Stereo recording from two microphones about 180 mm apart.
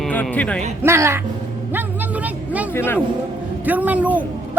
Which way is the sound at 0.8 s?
15° right (ahead or behind).